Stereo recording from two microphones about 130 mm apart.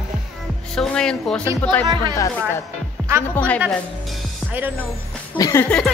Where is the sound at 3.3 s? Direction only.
10° left (ahead or behind).